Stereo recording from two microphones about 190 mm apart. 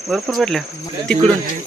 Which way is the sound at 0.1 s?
Centre (ahead or behind).